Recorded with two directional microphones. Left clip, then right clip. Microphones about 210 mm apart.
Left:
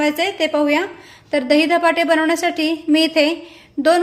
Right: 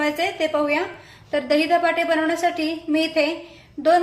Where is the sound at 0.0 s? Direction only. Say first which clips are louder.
Left 4 dB; 50° left (ahead or behind).